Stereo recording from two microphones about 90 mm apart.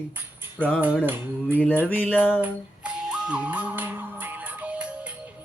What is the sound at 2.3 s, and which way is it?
Music, 15° right (ahead or behind).